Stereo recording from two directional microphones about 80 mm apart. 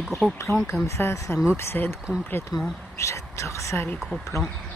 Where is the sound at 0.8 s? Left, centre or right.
Left.